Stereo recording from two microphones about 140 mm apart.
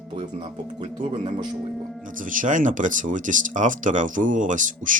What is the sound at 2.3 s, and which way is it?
Speech, 70° right (ahead or behind).